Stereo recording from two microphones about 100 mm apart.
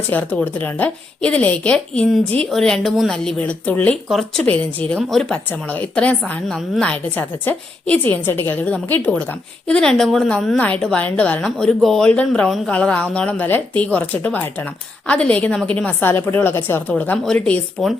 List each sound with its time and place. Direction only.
0.1 s a woman's voice: 15° left (ahead or behind)
4.1 s a woman's voice: 5° left (ahead or behind)
4.4 s a woman's voice: 15° left (ahead or behind)
4.9 s a woman's voice: 5° left (ahead or behind)
5.5 s a woman's voice: 15° left (ahead or behind)